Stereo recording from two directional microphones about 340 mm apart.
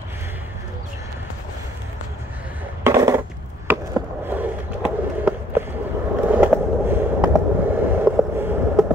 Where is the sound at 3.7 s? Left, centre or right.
Centre.